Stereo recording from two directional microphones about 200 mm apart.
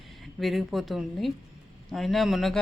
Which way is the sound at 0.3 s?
Centre (ahead or behind).